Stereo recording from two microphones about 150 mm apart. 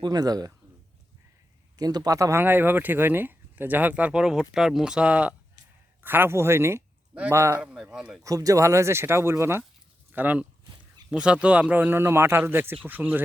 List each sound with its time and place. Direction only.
0.0 s speech: 25° right (ahead or behind)
1.8 s a man's voice: 25° right (ahead or behind)
7.6 s speech: 5° right (ahead or behind)
8.2 s speech: 20° right (ahead or behind)